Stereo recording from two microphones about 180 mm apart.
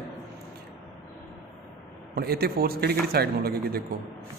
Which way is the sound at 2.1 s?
60° right (ahead or behind).